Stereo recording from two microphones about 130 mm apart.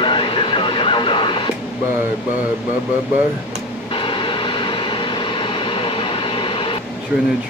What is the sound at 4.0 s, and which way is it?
Vehicle, 40° left (ahead or behind).